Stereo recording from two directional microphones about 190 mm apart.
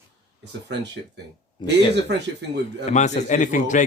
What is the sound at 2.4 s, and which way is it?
Speech, 65° right (ahead or behind).